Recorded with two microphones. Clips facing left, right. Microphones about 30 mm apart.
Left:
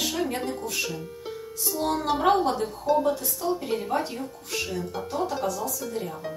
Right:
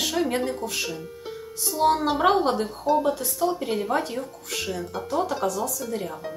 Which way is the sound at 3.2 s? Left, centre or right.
Right.